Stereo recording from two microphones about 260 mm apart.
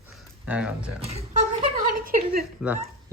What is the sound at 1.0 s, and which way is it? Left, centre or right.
Speech, right.